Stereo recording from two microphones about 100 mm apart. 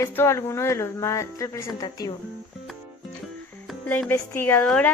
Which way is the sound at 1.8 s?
45° left (ahead or behind).